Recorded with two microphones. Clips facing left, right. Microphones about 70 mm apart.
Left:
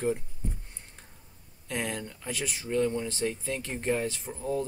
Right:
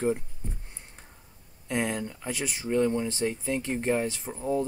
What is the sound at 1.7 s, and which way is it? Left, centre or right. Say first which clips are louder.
Speech: right 4 dB; centre.